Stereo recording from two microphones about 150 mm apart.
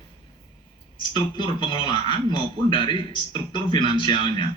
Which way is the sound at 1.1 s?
30° left (ahead or behind).